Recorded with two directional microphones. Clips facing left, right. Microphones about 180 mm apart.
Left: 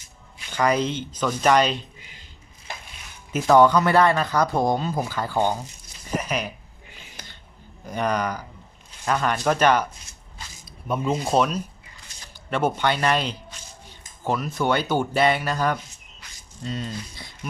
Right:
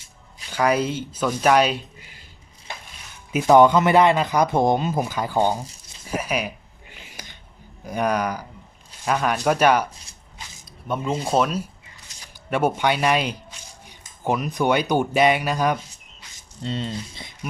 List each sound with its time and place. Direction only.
0.5 s speech: 10° right (ahead or behind)
3.3 s speech: 15° right (ahead or behind)
7.9 s speech: 10° right (ahead or behind)
10.7 s speech: centre (ahead or behind)
16.6 s speech: 25° right (ahead or behind)